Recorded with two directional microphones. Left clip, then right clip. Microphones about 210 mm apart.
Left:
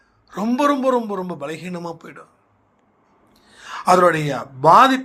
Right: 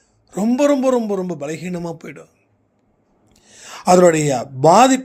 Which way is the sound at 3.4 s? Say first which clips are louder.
Even; 60° right (ahead or behind).